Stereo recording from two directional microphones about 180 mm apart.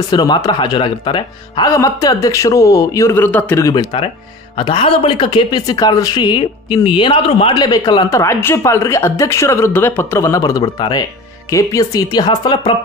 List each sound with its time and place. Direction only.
0.1 s speech: 25° left (ahead or behind)